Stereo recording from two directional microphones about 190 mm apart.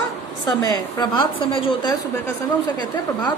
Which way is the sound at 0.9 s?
25° left (ahead or behind).